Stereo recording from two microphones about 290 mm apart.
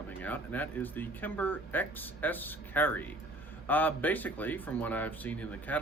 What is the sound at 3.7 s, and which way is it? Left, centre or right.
Speech, centre.